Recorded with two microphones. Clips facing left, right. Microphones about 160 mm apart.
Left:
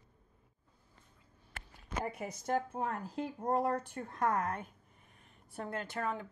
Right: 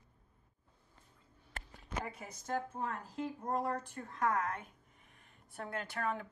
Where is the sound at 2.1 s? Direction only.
65° left (ahead or behind).